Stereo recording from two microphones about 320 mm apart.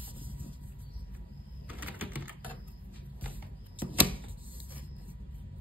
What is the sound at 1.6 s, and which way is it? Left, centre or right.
Typewriter, centre.